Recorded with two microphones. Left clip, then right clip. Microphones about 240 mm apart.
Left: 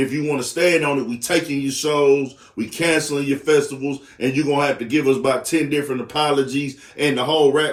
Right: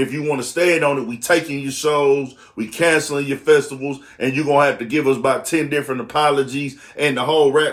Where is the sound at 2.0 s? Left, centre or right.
Centre.